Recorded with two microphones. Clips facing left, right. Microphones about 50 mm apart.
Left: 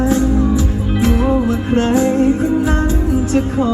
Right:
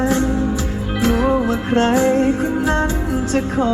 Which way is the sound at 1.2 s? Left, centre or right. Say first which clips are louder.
Left 1 dB; centre.